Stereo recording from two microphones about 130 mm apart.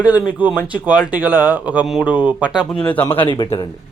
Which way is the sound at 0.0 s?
10° right (ahead or behind).